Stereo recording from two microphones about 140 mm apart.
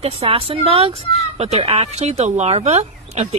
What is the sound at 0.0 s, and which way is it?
Speech, 45° right (ahead or behind).